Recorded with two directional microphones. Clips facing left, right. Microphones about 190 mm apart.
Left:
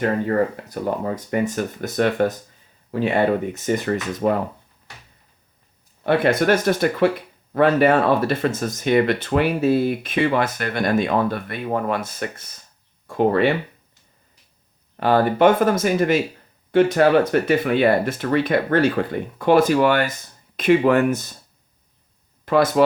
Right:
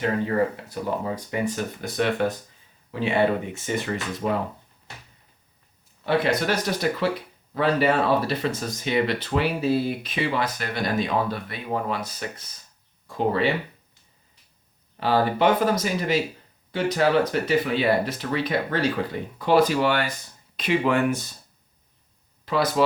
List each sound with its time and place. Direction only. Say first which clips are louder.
0.0 s speech: left 3 dB; 50° left (ahead or behind)
6.0 s speech: left 4 dB; 55° left (ahead or behind)
14.9 s speech: left 5 dB; 55° left (ahead or behind)
22.4 s speech: left 6 dB; 50° left (ahead or behind)